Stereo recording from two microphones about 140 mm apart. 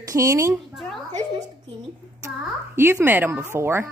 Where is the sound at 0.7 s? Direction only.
Centre (ahead or behind).